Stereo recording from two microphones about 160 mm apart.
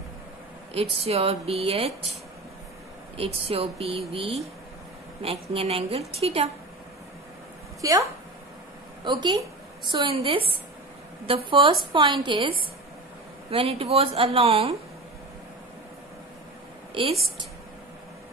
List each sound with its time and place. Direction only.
0.7 s speech: 40° right (ahead or behind)
3.2 s speech: 40° right (ahead or behind)
7.8 s a woman's voice: 20° right (ahead or behind); by 14.8 s 35° right (ahead or behind)